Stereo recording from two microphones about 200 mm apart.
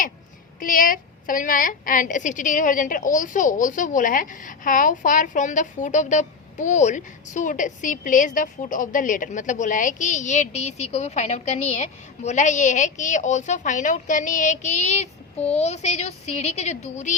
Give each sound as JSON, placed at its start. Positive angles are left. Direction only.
{"t": 0.6, "sound": "a woman's voice", "side_deg": 45}